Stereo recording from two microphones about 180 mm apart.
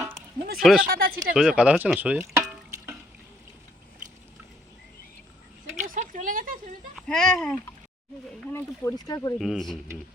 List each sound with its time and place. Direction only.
0.6 s speech: centre (ahead or behind)
0.9 s speech: 55° right (ahead or behind)
1.3 s speech: 5° right (ahead or behind)
5.8 s a sound: 45° right (ahead or behind)
6.9 s speech: 5° left (ahead or behind)
8.5 s speech: 15° left (ahead or behind)
9.4 s speech: centre (ahead or behind)